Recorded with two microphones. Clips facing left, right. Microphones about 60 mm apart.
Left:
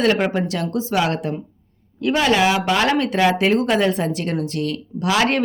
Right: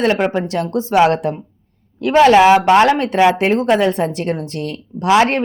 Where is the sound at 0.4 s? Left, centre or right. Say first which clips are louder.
Right 3 dB; right.